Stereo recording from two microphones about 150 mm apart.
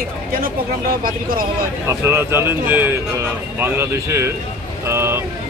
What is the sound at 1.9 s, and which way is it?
Speech, 15° right (ahead or behind).